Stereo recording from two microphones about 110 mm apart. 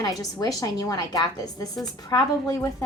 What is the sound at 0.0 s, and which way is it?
A woman's voice, 35° left (ahead or behind).